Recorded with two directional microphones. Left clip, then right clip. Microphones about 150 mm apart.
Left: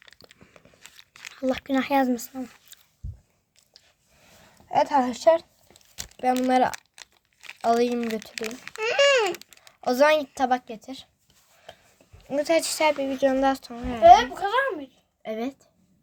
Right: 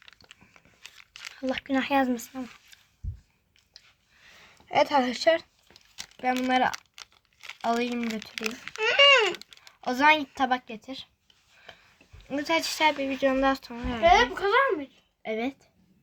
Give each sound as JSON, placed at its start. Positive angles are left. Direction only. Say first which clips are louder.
{"t": 0.2, "sound": "biting", "louder": "left 2 dB", "side_deg": 50}
{"t": 0.9, "sound": "a sound", "louder": "even", "side_deg": 15}
{"t": 1.4, "sound": "a child's voice", "louder": "left 3 dB", "side_deg": 40}
{"t": 4.9, "sound": "speech", "louder": "left 3 dB", "side_deg": 0}
{"t": 6.4, "sound": "a woman's voice", "louder": "left 3 dB", "side_deg": 50}
{"t": 7.7, "sound": "a woman's voice", "louder": "left 6 dB", "side_deg": 50}
{"t": 8.0, "sound": "a child's voice", "louder": "left 3 dB", "side_deg": 20}
{"t": 8.5, "sound": "babbling", "louder": "right 1 dB", "side_deg": 25}
{"t": 9.8, "sound": "a woman's voice", "louder": "left 2 dB", "side_deg": 55}
{"t": 11.7, "sound": "a sound", "louder": "left 3 dB", "side_deg": 40}
{"t": 12.3, "sound": "a child's voice", "louder": "left 4 dB", "side_deg": 40}
{"t": 14.0, "sound": "a child's voice", "louder": "left 6 dB", "side_deg": 40}